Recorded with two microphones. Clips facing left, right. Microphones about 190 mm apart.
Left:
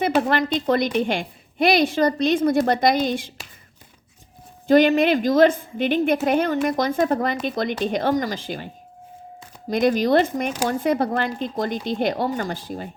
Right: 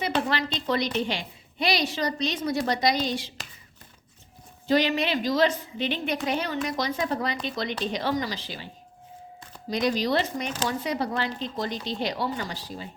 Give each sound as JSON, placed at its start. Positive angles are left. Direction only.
{"t": 0.3, "sound": "a woman's voice", "side_deg": 50}
{"t": 4.7, "sound": "a woman's voice", "side_deg": 50}